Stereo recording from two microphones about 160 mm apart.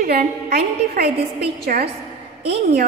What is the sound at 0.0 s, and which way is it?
A woman's voice, 80° right.